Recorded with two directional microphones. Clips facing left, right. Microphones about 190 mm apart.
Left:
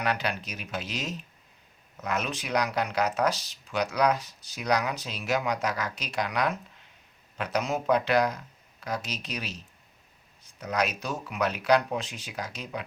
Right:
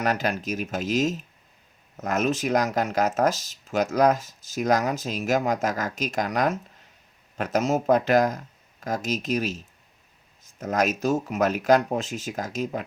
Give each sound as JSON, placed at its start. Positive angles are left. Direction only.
{"t": 0.0, "sound": "speech", "side_deg": -45}